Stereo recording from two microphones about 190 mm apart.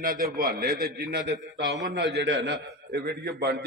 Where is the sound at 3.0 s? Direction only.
60° right (ahead or behind).